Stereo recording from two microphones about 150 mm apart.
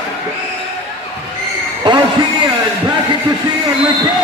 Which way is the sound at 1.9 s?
30° right (ahead or behind).